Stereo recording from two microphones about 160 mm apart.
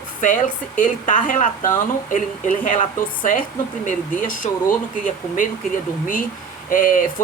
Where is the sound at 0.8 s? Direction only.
55° left (ahead or behind).